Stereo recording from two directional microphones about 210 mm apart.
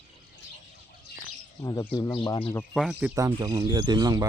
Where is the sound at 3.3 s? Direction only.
20° right (ahead or behind).